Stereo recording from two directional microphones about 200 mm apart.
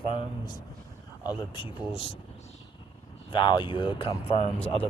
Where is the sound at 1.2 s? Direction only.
25° left (ahead or behind).